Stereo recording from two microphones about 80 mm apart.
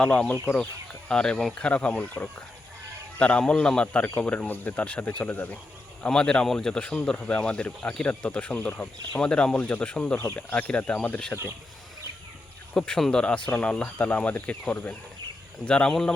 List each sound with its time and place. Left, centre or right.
0.0 s speech: centre
3.2 s speech: centre
6.1 s speech: centre
12.7 s speech: centre